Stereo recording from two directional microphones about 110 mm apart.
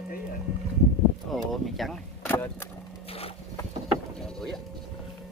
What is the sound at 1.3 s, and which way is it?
Vehicle, centre (ahead or behind).